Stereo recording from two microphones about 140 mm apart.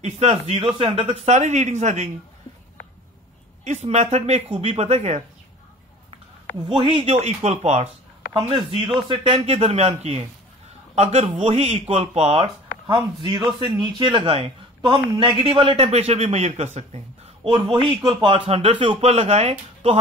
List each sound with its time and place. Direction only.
0.0 s a man's voice: 45° right (ahead or behind)
3.6 s a man's voice: 55° right (ahead or behind)
6.7 s a man's voice: 40° right (ahead or behind)
8.5 s a man's voice: 35° right (ahead or behind)
12.8 s speech: 35° right (ahead or behind); by 17.5 s 50° right (ahead or behind)
17.5 s a man's voice: 35° right (ahead or behind)